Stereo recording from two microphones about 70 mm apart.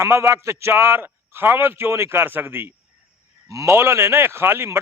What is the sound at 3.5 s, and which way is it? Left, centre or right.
A man's voice, right.